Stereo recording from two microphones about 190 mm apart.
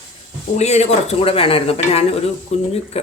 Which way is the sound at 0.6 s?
35° left (ahead or behind).